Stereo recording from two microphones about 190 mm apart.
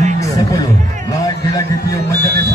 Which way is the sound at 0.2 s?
20° left (ahead or behind).